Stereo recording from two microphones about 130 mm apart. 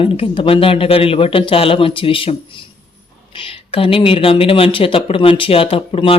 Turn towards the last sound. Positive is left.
turn(degrees=45)  # may be behind; listen again after turning